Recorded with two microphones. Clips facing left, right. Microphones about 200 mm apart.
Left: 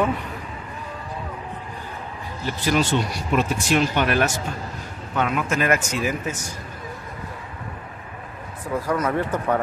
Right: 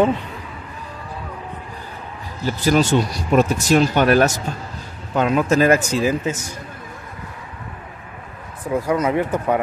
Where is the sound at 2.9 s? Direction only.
45° right (ahead or behind); by 6.3 s 30° right (ahead or behind).